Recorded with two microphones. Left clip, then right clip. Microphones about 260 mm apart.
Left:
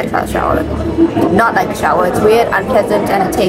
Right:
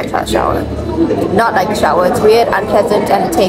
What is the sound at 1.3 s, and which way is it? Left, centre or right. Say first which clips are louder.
Speech: right 3 dB; centre.